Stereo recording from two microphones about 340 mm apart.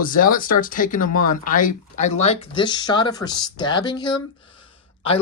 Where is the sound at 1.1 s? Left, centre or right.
Left.